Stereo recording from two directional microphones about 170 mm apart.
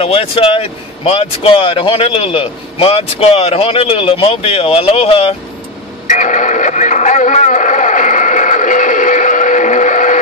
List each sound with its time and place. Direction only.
0.0 s a man's voice: 35° left (ahead or behind)
6.0 s radio: 45° left (ahead or behind)